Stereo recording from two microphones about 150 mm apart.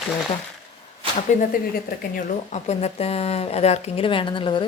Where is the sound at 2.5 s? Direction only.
45° left (ahead or behind).